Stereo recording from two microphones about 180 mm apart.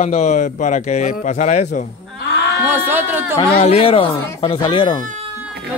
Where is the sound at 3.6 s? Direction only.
35° left (ahead or behind).